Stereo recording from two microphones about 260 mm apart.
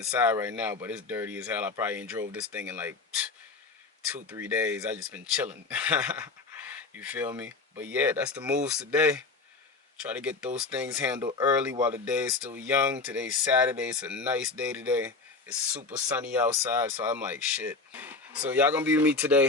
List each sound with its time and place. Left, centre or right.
0.1 s speech: centre
11.3 s speech: centre